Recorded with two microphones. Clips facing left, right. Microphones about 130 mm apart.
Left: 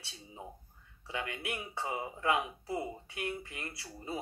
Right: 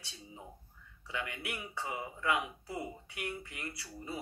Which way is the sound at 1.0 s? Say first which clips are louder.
Left 2 dB; 35° left (ahead or behind).